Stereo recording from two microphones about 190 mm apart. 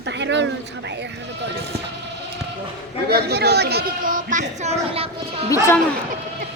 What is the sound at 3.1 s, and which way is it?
A man's voice, 55° right (ahead or behind).